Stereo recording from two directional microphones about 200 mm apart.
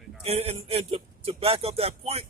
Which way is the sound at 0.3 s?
30° right (ahead or behind).